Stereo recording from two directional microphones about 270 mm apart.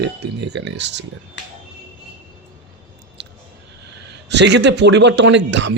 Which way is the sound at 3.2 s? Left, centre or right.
Right.